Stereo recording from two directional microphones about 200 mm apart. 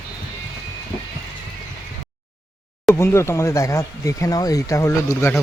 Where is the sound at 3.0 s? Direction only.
15° left (ahead or behind).